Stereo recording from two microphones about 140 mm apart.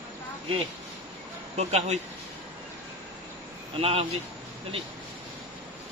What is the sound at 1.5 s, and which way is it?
Speech, 50° right (ahead or behind).